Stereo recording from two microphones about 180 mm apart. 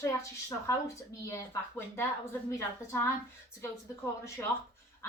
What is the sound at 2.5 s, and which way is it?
Speech, 15° left (ahead or behind).